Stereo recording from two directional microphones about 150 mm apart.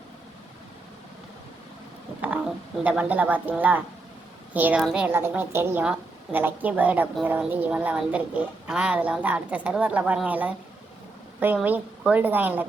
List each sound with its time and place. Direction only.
2.8 s a woman's voice: 10° right (ahead or behind)